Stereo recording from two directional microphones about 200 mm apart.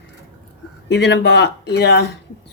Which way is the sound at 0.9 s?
60° left (ahead or behind).